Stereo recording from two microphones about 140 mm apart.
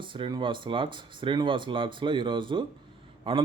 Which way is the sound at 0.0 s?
35° right (ahead or behind).